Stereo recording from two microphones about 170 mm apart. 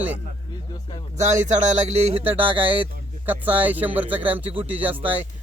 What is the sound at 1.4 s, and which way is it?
Speech, 40° right (ahead or behind).